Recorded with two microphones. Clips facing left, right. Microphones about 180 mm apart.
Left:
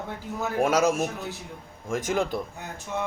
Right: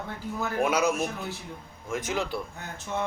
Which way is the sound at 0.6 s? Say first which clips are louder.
Left 3 dB; 45° left (ahead or behind).